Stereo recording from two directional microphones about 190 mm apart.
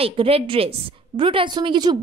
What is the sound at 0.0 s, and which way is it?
A woman's voice, 30° right (ahead or behind).